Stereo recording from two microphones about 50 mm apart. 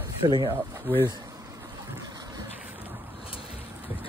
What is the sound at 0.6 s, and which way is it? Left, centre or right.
Speech, right.